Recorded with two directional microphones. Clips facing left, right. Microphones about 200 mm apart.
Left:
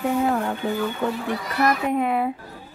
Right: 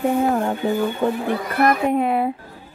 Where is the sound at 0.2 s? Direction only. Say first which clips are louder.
Right 3 dB; 25° right (ahead or behind).